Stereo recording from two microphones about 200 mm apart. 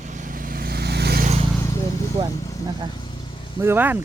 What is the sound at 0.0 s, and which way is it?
Vehicle, 40° right (ahead or behind).